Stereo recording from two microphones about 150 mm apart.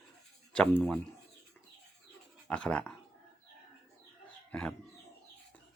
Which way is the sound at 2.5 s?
5° left (ahead or behind).